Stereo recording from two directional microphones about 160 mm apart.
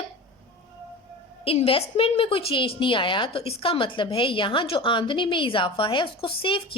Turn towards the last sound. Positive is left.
turn(degrees=35)  # may be behind; listen again after turning